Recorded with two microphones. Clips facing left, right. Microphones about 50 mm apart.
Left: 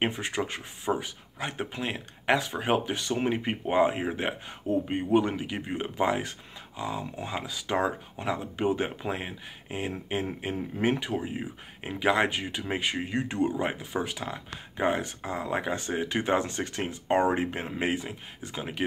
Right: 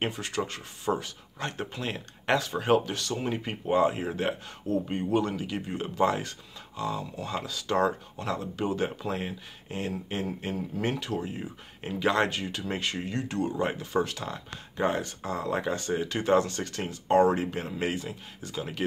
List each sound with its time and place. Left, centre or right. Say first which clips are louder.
0.0 s speech: left 2 dB; left